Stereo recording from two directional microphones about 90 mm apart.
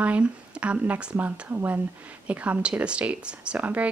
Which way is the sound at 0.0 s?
15° right (ahead or behind).